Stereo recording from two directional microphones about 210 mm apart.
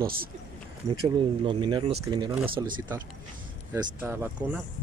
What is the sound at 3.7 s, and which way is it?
Speech, 10° right (ahead or behind).